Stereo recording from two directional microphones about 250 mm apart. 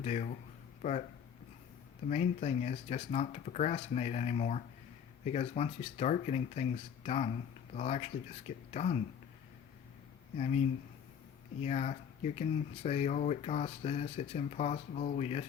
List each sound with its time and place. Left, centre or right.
0.0 s speech: left
2.0 s speech: left
10.3 s speech: left